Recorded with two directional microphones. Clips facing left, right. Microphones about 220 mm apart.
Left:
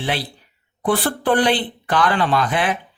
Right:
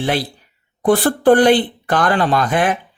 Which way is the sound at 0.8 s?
45° right (ahead or behind).